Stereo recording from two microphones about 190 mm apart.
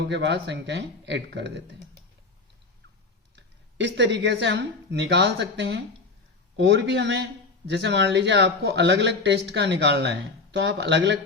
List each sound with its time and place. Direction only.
0.0 s speech: 65° right (ahead or behind)
3.3 s speech: 70° right (ahead or behind)